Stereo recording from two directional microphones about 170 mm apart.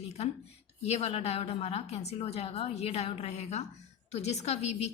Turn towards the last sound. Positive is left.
turn(degrees=40)  # may be behind; listen again after turning